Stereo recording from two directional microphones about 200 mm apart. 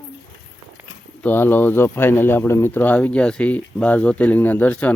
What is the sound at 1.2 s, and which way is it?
Speech, 10° left (ahead or behind).